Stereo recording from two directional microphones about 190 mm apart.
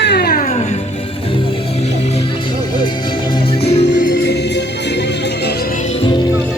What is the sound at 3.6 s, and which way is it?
Music, 35° left (ahead or behind).